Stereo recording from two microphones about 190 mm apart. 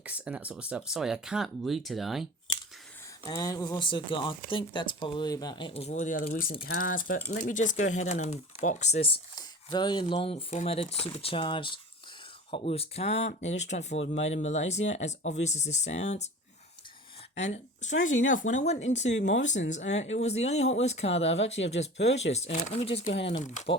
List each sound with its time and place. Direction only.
0.0 s speech: 5° right (ahead or behind)
3.2 s speech: 20° left (ahead or behind); by 16.3 s 35° left (ahead or behind)
17.3 s a woman's voice: 35° left (ahead or behind)
19.0 s speech: 70° left (ahead or behind)
19.5 s speech: 40° left (ahead or behind)
21.6 s speech: 70° left (ahead or behind)
22.5 s speech: 35° left (ahead or behind)